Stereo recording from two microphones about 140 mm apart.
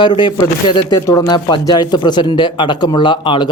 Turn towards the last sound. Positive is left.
turn(degrees=35)  # may be behind; listen again after turning